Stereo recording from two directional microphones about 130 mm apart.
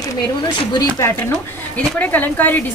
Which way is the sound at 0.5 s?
35° left (ahead or behind).